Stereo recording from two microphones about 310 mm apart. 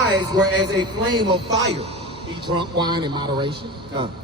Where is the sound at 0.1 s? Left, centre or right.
Centre.